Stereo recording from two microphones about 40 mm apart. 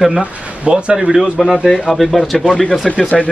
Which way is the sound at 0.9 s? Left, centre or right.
Centre.